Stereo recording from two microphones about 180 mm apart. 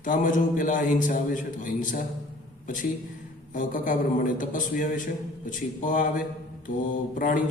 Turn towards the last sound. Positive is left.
turn(degrees=50)  # may be behind; listen again after turning